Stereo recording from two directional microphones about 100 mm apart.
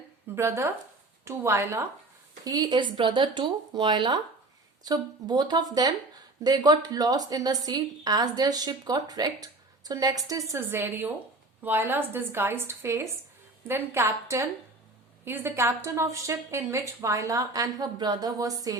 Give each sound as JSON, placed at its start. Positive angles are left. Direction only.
{"t": 0.3, "sound": "a woman's voice", "side_deg": -30}
{"t": 2.4, "sound": "a woman's voice", "side_deg": -40}